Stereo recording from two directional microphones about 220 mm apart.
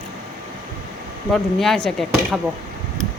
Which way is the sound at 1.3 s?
Centre (ahead or behind).